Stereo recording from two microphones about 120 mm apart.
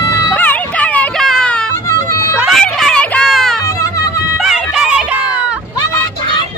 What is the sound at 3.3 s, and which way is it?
Music, centre (ahead or behind).